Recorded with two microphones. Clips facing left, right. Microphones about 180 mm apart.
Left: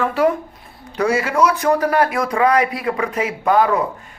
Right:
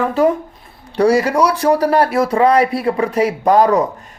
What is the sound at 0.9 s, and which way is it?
Speech, 35° right (ahead or behind).